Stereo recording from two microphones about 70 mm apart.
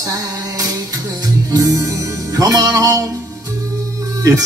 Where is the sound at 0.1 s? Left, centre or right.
Right.